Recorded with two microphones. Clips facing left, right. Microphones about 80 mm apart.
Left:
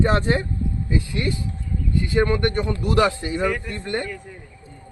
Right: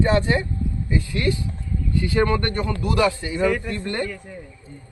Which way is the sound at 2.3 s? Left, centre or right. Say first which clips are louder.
Left 2 dB; centre.